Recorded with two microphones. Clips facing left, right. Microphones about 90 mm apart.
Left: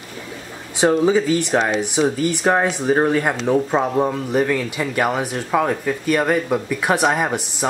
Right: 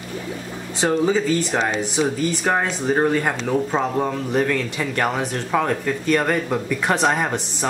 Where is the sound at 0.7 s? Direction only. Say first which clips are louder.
Left 3 dB; 15° left (ahead or behind).